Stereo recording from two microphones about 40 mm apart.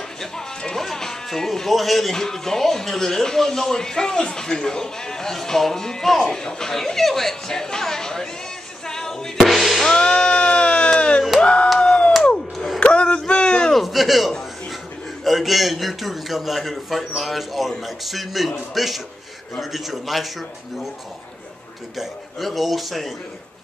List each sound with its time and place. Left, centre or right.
0.2 s music: centre
0.7 s speech: centre
8.8 s music: centre
9.4 s music: centre
9.9 s music: centre
11.4 s crowd: left
11.8 s a sound: left
12.5 s a sound: centre
12.8 s a sound: left
13.7 s a sound: centre
15.2 s a man's voice: centre
21.9 s a man's voice: centre